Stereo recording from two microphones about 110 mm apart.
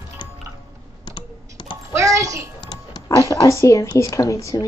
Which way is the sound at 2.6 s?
40° left (ahead or behind).